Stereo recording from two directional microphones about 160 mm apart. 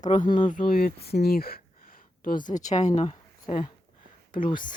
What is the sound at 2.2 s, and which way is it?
Speech, 55° left (ahead or behind).